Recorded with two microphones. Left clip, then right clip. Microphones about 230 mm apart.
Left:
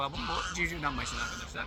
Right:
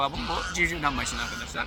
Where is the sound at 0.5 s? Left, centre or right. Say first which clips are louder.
Right 7 dB; centre.